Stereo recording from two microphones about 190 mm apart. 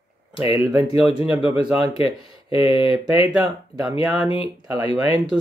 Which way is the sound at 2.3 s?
25° left (ahead or behind).